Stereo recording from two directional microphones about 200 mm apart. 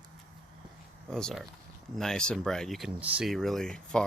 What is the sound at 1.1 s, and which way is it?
Speech, 5° left (ahead or behind).